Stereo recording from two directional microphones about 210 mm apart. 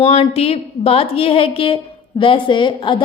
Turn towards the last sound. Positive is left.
turn(degrees=25)  # may be behind; listen again after turning